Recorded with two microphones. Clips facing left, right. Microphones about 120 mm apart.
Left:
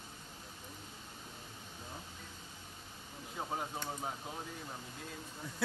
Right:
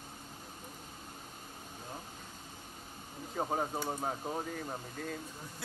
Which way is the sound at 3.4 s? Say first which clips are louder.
Right 6 dB; 40° right (ahead or behind).